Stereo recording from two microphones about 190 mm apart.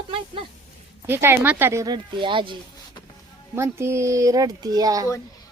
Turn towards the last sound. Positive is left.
turn(degrees=-20)  # may be behind; listen again after turning